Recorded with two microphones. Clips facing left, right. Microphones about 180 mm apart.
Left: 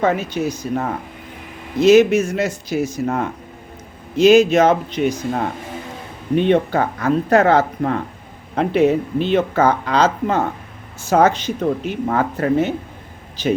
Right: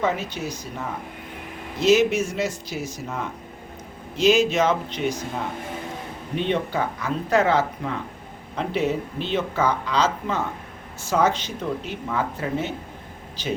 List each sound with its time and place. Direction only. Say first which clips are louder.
0.0 s speech: left 7 dB; 55° left (ahead or behind)